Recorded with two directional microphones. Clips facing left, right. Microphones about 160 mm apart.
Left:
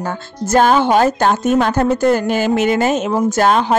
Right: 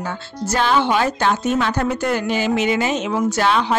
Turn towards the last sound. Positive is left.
turn(degrees=45)  # may be behind; listen again after turning